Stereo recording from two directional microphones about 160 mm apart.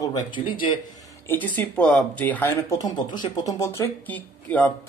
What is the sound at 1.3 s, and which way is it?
Speech, 10° left (ahead or behind).